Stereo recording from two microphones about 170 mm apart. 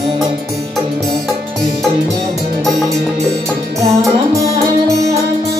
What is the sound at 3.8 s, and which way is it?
Music, 20° right (ahead or behind).